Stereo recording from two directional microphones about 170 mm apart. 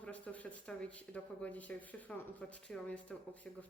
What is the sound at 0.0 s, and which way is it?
Speech, 5° left (ahead or behind).